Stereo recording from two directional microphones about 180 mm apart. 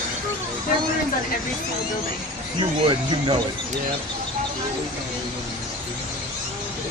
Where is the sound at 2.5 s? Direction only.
25° right (ahead or behind).